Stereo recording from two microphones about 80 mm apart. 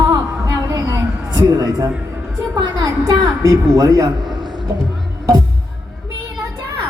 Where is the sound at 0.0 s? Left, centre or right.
Right.